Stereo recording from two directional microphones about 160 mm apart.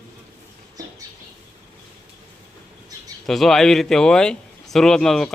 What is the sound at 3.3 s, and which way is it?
Speech, centre (ahead or behind).